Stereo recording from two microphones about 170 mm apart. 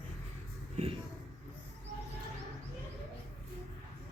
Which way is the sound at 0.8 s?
40° right (ahead or behind).